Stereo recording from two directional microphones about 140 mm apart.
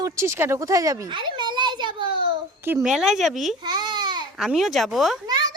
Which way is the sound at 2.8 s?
5° right (ahead or behind).